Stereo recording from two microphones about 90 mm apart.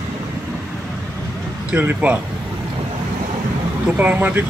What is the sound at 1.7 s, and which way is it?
Speech, 15° right (ahead or behind).